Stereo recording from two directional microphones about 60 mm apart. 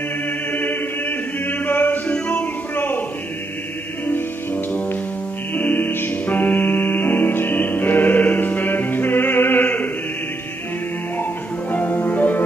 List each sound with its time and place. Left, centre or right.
0.5 s chant: left
2.2 s music: left
5.5 s music: left
11.7 s music: left